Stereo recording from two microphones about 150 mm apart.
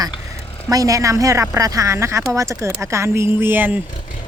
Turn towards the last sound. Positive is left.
turn(degrees=-15)  # may be behind; listen again after turning